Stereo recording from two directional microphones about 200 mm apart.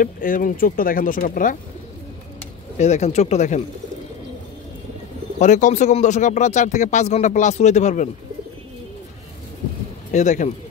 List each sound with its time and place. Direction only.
0.0 s speech: 45° left (ahead or behind)
2.8 s speech: 35° left (ahead or behind)
5.4 s speech: 35° left (ahead or behind)
10.1 s speech: 35° left (ahead or behind)